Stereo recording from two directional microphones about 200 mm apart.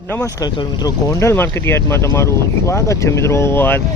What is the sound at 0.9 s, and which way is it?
Speech, 15° left (ahead or behind).